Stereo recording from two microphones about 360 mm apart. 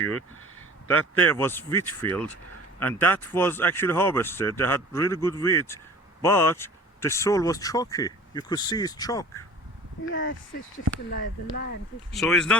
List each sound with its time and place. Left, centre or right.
1.1 s speech: centre
10.1 s speech: left
12.1 s speech: centre